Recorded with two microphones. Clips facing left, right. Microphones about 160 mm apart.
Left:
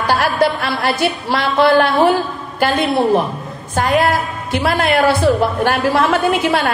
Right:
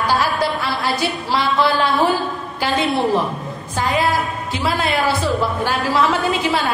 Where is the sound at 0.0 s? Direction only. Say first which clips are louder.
Left 4 dB; 65° left (ahead or behind).